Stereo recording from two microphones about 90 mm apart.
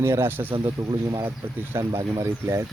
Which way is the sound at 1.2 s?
25° right (ahead or behind).